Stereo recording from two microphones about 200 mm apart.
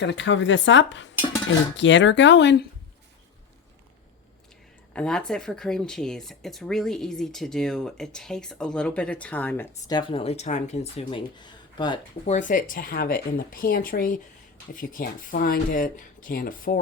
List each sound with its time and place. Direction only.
0.0 s speech: 65° left (ahead or behind)
4.9 s speech: 5° left (ahead or behind); by 11.9 s 20° left (ahead or behind)
12.2 s speech: 35° left (ahead or behind)